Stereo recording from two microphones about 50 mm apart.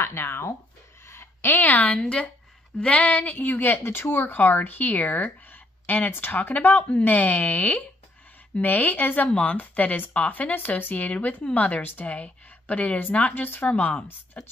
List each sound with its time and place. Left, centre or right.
0.0 s speech: left
1.0 s a sound: left
2.0 s a woman's voice: left